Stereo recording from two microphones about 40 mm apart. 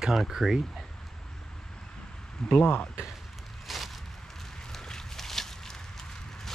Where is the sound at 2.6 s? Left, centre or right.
Left.